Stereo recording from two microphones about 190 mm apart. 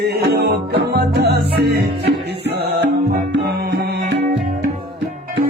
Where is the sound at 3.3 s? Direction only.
60° right (ahead or behind).